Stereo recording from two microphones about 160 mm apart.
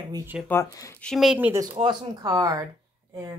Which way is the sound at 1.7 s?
30° right (ahead or behind).